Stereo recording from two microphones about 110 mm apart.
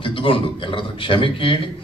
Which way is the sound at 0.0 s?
55° left (ahead or behind).